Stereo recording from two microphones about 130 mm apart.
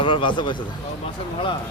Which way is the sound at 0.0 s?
40° left (ahead or behind).